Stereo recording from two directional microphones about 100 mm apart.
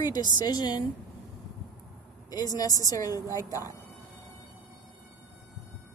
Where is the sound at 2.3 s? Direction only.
40° left (ahead or behind).